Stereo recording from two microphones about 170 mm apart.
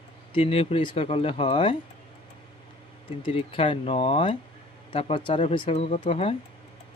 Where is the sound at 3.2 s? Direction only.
35° left (ahead or behind).